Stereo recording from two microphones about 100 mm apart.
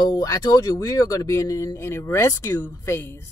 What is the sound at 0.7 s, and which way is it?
Speech, 30° left (ahead or behind).